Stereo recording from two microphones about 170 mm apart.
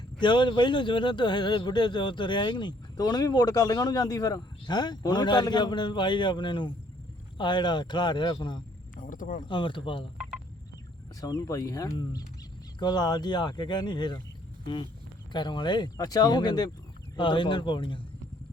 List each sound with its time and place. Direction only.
0.2 s speech: 25° left (ahead or behind)
9.0 s speech: 50° left (ahead or behind)
9.4 s speech: 30° left (ahead or behind)
11.2 s speech: 20° left (ahead or behind)